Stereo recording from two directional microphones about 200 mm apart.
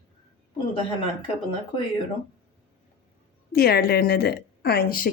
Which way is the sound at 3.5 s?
50° left (ahead or behind).